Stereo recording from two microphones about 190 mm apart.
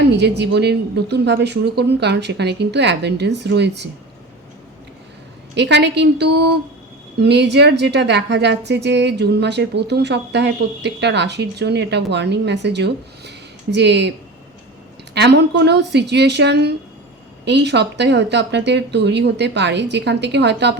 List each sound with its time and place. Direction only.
0.1 s a woman's voice: 60° right (ahead or behind)
5.5 s a woman's voice: 65° right (ahead or behind)
15.1 s a woman's voice: 60° right (ahead or behind)